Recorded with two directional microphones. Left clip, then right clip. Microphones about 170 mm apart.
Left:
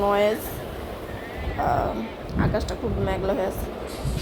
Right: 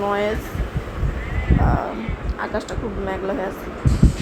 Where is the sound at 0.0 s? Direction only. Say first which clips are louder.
Left 1 dB; 20° left (ahead or behind).